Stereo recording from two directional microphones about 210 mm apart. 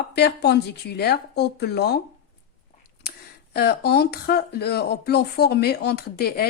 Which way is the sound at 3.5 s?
50° left (ahead or behind).